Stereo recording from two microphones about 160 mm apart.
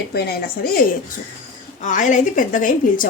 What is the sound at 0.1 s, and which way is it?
Speech, 70° left (ahead or behind).